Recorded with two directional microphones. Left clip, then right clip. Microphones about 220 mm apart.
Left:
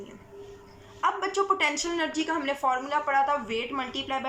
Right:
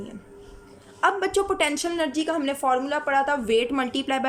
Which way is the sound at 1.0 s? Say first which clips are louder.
Right 4 dB; 40° right (ahead or behind).